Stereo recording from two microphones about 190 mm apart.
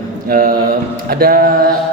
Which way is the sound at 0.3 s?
50° right (ahead or behind).